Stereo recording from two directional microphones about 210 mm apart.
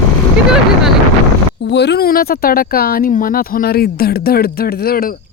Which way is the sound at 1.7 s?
55° left (ahead or behind).